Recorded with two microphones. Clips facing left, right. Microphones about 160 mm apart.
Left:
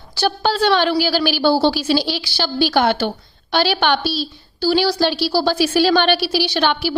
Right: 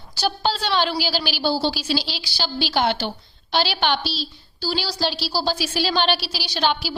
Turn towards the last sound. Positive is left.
turn(degrees=60)  # may be behind; listen again after turning